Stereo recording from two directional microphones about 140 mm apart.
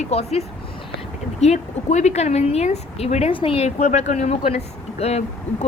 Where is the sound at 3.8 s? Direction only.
60° left (ahead or behind).